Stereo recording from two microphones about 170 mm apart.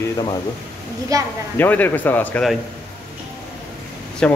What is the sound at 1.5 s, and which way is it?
A man's voice, 10° left (ahead or behind).